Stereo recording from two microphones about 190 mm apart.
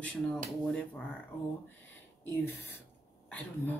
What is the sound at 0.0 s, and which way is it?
Speech, 5° left (ahead or behind).